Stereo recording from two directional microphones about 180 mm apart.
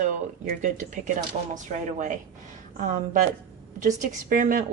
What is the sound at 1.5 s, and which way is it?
A woman's voice, 40° right (ahead or behind).